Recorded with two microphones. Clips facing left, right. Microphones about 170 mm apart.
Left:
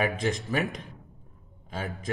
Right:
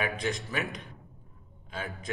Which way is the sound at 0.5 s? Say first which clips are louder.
Left 5 dB; 45° left (ahead or behind).